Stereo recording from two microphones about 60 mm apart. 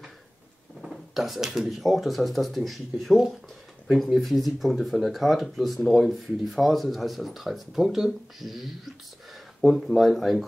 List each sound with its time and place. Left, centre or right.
0.8 s speech: centre